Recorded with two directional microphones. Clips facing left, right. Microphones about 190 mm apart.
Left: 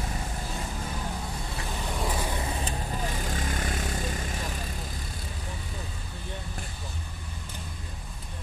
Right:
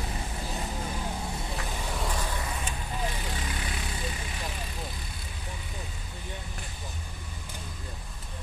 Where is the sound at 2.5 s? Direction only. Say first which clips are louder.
Left 3 dB; 35° left (ahead or behind).